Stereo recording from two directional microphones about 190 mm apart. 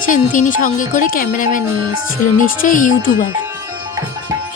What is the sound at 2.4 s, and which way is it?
Speech, 45° left (ahead or behind).